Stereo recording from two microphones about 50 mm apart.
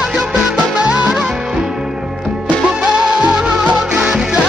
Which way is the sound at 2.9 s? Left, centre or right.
Centre.